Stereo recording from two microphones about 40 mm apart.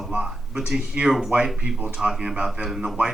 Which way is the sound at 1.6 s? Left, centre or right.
Right.